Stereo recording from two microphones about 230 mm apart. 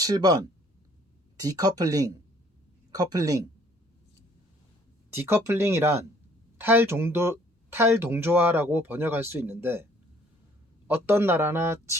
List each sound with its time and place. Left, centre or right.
0.0 s speech: centre
5.1 s speech: centre
10.8 s speech: centre